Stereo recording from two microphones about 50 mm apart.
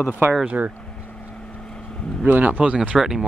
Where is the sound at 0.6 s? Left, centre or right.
Right.